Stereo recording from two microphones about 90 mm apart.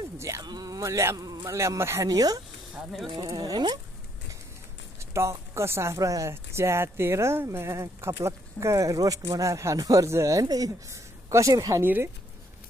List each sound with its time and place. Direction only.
0.4 s speech: 45° right (ahead or behind)
2.0 s speech: 45° right (ahead or behind)
2.7 s speech: centre (ahead or behind)
3.3 s speech: 40° right (ahead or behind)
4.9 s speech: 30° right (ahead or behind)
11.8 s speech: 25° right (ahead or behind)